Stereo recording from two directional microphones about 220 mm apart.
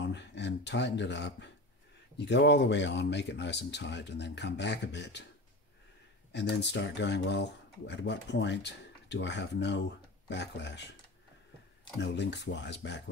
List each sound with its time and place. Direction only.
0.0 s speech: 55° left (ahead or behind)
6.3 s speech: 50° left (ahead or behind)
12.0 s speech: 50° left (ahead or behind)